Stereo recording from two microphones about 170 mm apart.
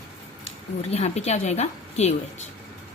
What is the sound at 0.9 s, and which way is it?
A woman's voice, 40° left (ahead or behind).